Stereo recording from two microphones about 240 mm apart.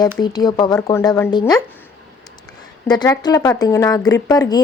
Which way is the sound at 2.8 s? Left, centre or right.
Centre.